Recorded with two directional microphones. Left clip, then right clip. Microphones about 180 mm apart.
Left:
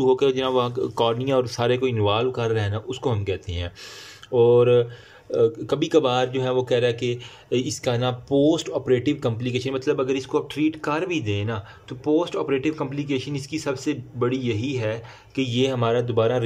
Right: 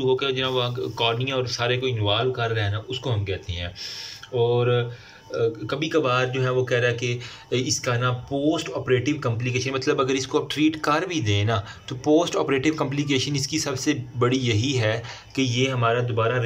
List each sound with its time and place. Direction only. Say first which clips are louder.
0.0 s speech: left 3 dB; 35° left (ahead or behind)
9.8 s speech: right 1 dB; 10° left (ahead or behind)
15.5 s speech: left 2 dB; 25° left (ahead or behind)